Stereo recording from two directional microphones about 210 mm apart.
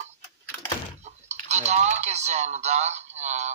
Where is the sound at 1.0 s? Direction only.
35° right (ahead or behind).